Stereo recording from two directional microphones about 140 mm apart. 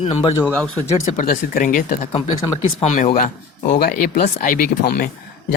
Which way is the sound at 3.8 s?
90° left.